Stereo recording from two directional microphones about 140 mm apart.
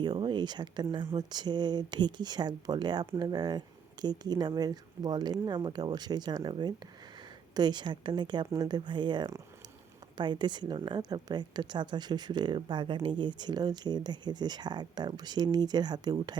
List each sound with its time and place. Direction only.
0.0 s a woman's voice: 30° right (ahead or behind)